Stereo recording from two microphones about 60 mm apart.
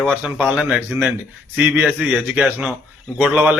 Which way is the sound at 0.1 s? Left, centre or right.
Right.